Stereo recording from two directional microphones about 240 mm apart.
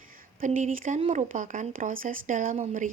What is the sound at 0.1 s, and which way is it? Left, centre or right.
A woman's voice, right.